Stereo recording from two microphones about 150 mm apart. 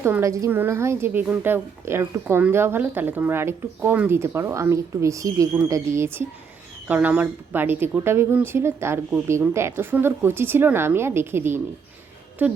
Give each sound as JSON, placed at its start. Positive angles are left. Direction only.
{"t": 0.0, "sound": "a woman's voice", "side_deg": -15}
{"t": 6.8, "sound": "a woman's voice", "side_deg": -10}